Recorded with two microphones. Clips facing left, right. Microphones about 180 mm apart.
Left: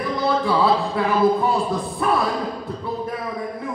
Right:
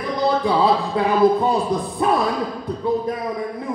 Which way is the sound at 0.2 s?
15° right (ahead or behind).